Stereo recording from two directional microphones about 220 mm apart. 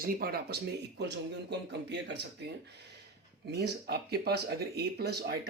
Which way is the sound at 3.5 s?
45° right (ahead or behind).